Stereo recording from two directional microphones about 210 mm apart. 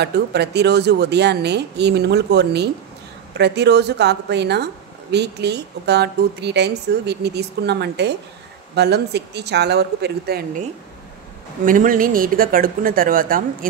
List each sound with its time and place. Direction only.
0.0 s a woman's voice: 50° right (ahead or behind)
11.6 s speech: 40° right (ahead or behind)